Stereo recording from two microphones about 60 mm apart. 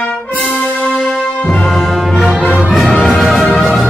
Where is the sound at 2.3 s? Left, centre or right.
Right.